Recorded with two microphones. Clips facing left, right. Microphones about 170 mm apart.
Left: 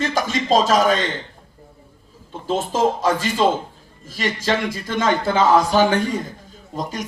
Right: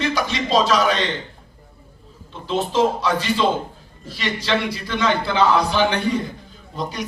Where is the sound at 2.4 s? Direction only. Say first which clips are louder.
Even; 45° left (ahead or behind).